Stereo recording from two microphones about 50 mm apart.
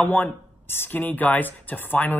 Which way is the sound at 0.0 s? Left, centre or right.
Left.